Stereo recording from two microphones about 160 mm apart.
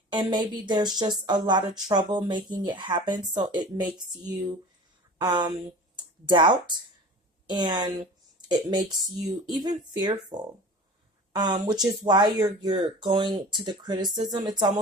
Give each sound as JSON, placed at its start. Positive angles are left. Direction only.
{"t": 0.1, "sound": "speech", "side_deg": -30}